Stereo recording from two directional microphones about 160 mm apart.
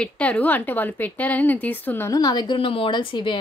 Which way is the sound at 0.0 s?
10° left (ahead or behind).